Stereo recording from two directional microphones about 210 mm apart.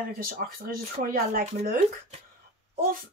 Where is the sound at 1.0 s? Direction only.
40° right (ahead or behind).